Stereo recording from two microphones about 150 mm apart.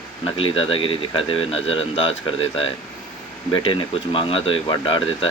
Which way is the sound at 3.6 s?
35° left (ahead or behind).